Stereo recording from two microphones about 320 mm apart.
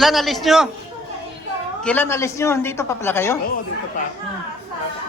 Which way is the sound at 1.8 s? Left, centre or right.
Centre.